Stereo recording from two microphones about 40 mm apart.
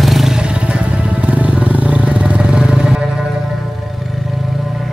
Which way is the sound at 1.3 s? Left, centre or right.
Right.